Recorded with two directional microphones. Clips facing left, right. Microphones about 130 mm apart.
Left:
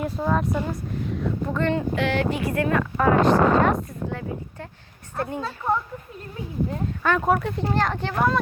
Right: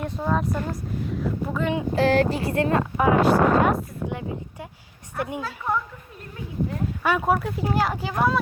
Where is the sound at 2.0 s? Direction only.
40° right (ahead or behind).